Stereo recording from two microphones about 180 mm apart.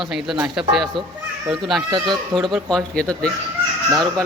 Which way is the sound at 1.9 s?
25° right (ahead or behind).